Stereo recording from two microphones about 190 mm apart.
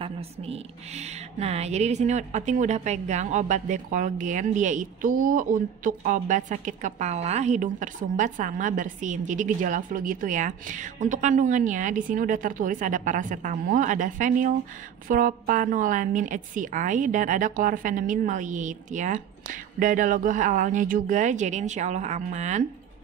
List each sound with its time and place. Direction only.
0.0 s a woman's voice: 30° right (ahead or behind)